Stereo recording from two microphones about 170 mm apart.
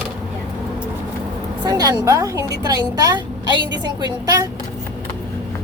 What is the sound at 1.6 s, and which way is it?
A woman's voice, 20° right (ahead or behind).